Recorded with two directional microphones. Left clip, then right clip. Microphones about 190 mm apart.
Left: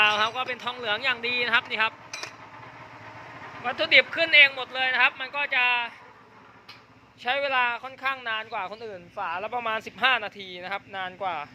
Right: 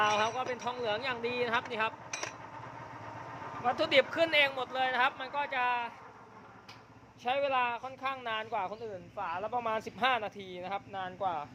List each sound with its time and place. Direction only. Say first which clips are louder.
0.0 s speech: left 7 dB; centre (ahead or behind)
3.6 s speech: left 7 dB; 15° right (ahead or behind)
7.3 s speech: left 6 dB; centre (ahead or behind); by 8.6 s 15° right (ahead or behind)
8.9 s speech: left 6 dB; 20° left (ahead or behind)
9.5 s speech: left 4 dB; 5° left (ahead or behind)
9.7 s speech: left 9 dB; 10° right (ahead or behind)